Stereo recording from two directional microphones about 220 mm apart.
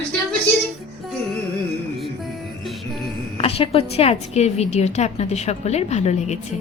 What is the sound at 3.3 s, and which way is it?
A woman's voice, 25° left (ahead or behind).